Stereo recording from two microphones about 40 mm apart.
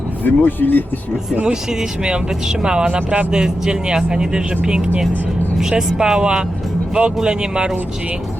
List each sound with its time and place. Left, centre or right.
0.3 s speech: left
1.7 s speech: centre